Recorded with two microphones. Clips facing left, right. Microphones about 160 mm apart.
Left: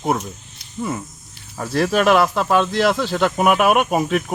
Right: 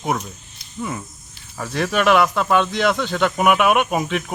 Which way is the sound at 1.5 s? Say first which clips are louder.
Left 3 dB; 5° left (ahead or behind).